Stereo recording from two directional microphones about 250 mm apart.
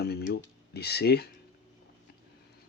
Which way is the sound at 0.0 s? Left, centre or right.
Left.